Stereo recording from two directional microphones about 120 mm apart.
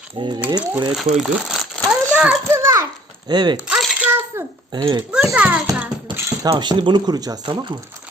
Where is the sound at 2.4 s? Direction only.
20° right (ahead or behind).